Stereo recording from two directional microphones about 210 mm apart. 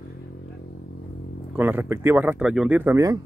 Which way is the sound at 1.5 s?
10° right (ahead or behind).